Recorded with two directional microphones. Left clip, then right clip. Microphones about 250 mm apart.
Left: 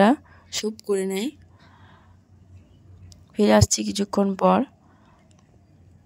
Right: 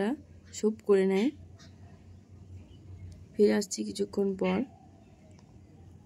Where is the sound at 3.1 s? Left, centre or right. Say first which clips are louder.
Left 7 dB; left.